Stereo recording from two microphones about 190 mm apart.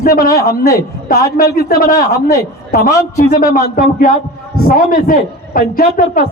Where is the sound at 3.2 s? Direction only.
45° left (ahead or behind).